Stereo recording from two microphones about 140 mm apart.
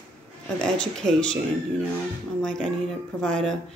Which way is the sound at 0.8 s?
5° left (ahead or behind).